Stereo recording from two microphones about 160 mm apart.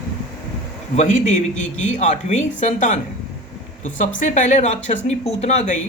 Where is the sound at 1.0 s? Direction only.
50° left (ahead or behind).